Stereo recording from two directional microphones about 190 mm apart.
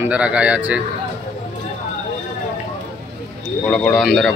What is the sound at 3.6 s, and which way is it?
Speech, 5° left (ahead or behind).